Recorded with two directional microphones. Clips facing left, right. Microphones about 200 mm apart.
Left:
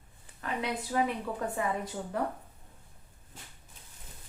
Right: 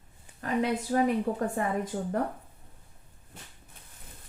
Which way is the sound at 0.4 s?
45° right (ahead or behind).